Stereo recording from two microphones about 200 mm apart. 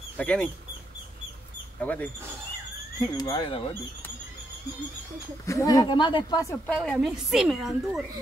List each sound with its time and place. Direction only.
0.2 s speech: 5° left (ahead or behind)
1.8 s speech: 5° left (ahead or behind)
3.2 s speech: 20° left (ahead or behind)
5.5 s speech: 15° left (ahead or behind)
6.7 s a woman's voice: centre (ahead or behind)